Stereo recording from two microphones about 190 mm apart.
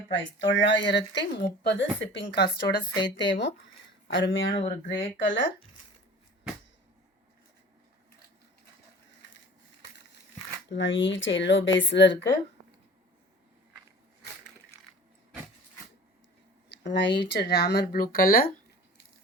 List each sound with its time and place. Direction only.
0.1 s speech: 75° left (ahead or behind)
4.4 s speech: 30° left (ahead or behind)
5.1 s speech: 75° left (ahead or behind)
9.2 s a sound: 70° left (ahead or behind)
10.7 s speech: 75° left (ahead or behind)
16.7 s speech: 65° left (ahead or behind); by 18.5 s 50° left (ahead or behind)